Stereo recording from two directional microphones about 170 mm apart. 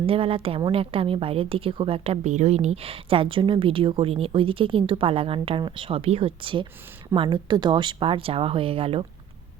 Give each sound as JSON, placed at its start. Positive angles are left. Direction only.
{"t": 0.0, "sound": "a woman's voice", "side_deg": -35}